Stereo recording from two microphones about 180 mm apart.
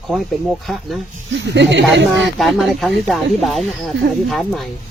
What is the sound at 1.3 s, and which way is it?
Speech, 75° right (ahead or behind).